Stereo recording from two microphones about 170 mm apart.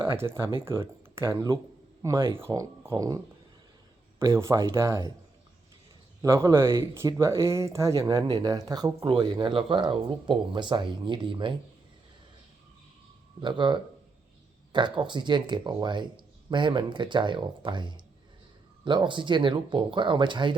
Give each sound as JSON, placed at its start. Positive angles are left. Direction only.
{"t": 0.1, "sound": "speech", "side_deg": -15}
{"t": 4.2, "sound": "speech", "side_deg": -15}
{"t": 6.2, "sound": "speech", "side_deg": -15}
{"t": 13.4, "sound": "speech", "side_deg": -25}